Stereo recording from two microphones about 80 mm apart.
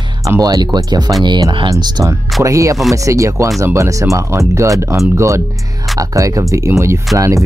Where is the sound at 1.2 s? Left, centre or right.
Right.